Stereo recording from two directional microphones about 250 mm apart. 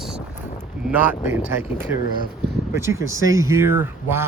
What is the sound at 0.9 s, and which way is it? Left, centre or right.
Speech, centre.